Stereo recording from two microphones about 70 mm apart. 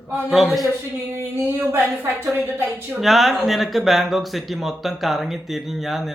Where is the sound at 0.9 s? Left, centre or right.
Right.